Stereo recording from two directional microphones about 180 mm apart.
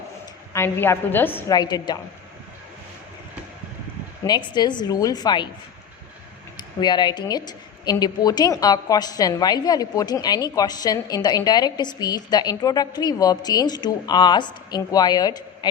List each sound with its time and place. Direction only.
0.5 s a woman's voice: 15° left (ahead or behind)
4.3 s a woman's voice: 25° left (ahead or behind)
6.6 s a woman's voice: 25° left (ahead or behind)